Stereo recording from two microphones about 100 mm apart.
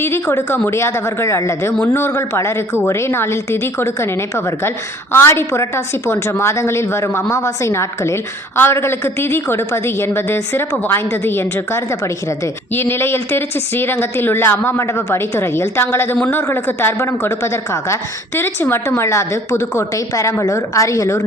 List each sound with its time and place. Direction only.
0.0 s a woman's voice: 25° left (ahead or behind)